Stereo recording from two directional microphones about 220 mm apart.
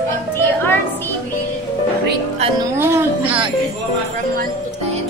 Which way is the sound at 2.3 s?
25° right (ahead or behind).